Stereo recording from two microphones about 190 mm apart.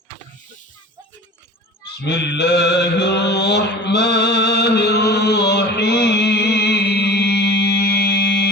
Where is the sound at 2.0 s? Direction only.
60° left (ahead or behind).